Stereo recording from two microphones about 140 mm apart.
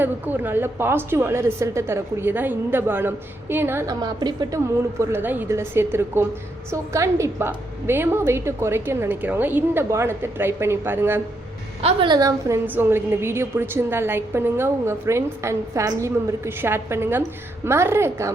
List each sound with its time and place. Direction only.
0.0 s a woman's voice: 15° right (ahead or behind)
4.0 s a woman's voice: 30° right (ahead or behind)
11.8 s a woman's voice: 40° right (ahead or behind)
12.6 s a woman's voice: 15° right (ahead or behind)